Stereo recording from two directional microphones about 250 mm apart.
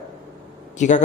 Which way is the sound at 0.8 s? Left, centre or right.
Left.